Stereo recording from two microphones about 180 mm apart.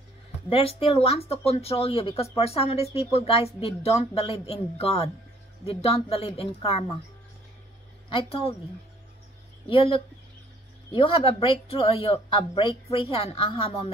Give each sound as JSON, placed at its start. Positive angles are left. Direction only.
{"t": 0.5, "sound": "speech", "side_deg": 30}
{"t": 8.2, "sound": "speech", "side_deg": 30}
{"t": 9.7, "sound": "speech", "side_deg": 30}